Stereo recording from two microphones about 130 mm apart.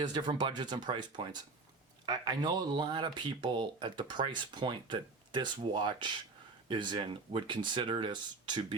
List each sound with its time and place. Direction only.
0.0 s speech: 35° right (ahead or behind)